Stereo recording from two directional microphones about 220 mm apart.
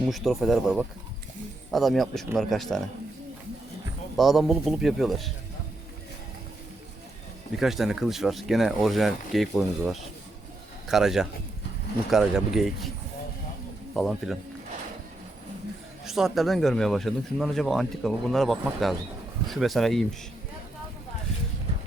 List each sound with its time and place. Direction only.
0.0 s speech: centre (ahead or behind)
4.2 s speech: centre (ahead or behind)
7.6 s a man's voice: centre (ahead or behind)
13.9 s speech: centre (ahead or behind)
16.0 s speech: centre (ahead or behind)